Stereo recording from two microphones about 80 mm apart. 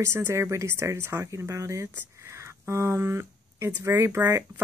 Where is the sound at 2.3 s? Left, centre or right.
Right.